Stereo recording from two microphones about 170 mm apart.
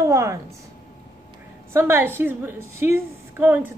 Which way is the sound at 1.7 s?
15° right (ahead or behind).